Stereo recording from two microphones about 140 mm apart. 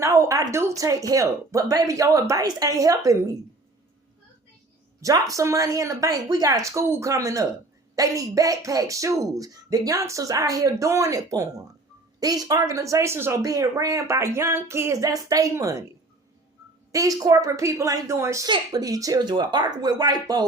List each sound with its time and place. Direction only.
0.0 s a sound: 20° right (ahead or behind)
0.8 s speech: 25° right (ahead or behind)
4.9 s a woman's voice: 25° right (ahead or behind)
16.9 s speech: 25° right (ahead or behind)